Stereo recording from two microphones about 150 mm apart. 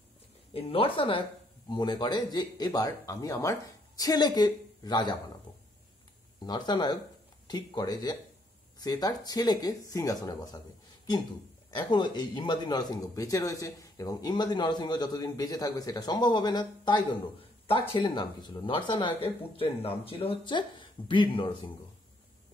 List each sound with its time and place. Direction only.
0.5 s speech: 40° left (ahead or behind)
6.4 s speech: 30° left (ahead or behind)
11.7 s speech: 30° left (ahead or behind)